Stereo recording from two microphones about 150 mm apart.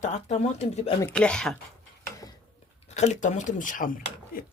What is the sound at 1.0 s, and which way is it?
Speech, 5° left (ahead or behind).